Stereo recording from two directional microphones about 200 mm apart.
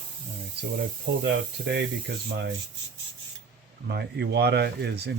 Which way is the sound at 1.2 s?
60° right (ahead or behind).